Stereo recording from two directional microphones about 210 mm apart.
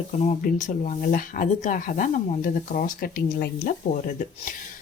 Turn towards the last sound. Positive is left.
turn(degrees=40)  # may be behind; listen again after turning